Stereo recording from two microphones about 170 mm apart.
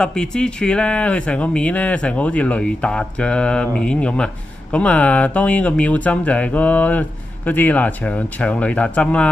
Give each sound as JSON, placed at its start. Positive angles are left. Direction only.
{"t": 0.0, "sound": "speech", "side_deg": 5}